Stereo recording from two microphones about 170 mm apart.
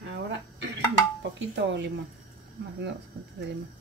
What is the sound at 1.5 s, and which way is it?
Speech, 90° right.